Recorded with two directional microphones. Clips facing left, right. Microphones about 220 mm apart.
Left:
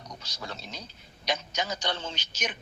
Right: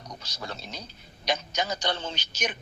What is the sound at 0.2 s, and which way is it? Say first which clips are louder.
Speech: right 2 dB; 35° right (ahead or behind).